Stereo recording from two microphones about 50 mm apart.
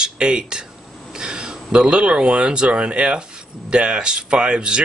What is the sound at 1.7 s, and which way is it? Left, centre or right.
Speech, right.